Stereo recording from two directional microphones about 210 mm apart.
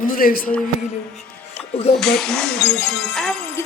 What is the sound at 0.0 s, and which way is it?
Speech, 45° left (ahead or behind).